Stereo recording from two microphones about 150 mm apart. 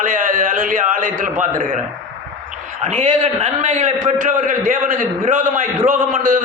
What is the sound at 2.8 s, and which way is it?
A man's voice, 55° right (ahead or behind).